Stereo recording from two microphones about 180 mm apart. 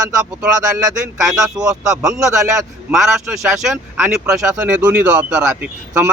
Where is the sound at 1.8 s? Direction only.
5° right (ahead or behind).